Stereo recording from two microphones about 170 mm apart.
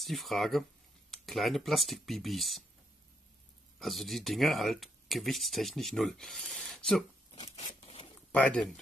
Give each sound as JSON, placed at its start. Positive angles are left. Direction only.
{"t": 0.0, "sound": "speech", "side_deg": 0}
{"t": 3.8, "sound": "speech", "side_deg": 0}
{"t": 7.2, "sound": "zipper", "side_deg": 35}
{"t": 8.3, "sound": "speech", "side_deg": 10}